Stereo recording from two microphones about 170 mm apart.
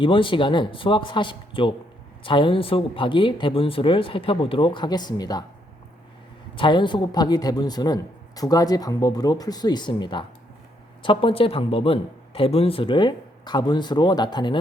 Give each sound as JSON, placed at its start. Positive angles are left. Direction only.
{"t": 0.0, "sound": "speech", "side_deg": 30}
{"t": 6.6, "sound": "speech", "side_deg": 30}